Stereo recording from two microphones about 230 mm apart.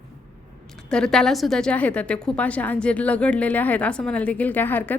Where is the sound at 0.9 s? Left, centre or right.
Centre.